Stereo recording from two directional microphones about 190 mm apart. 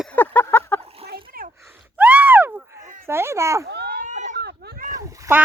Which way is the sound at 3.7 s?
60° right (ahead or behind).